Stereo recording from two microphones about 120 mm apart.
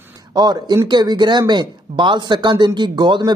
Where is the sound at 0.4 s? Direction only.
35° right (ahead or behind).